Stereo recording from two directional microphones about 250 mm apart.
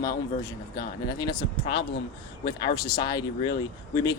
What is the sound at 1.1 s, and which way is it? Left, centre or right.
Speech, centre.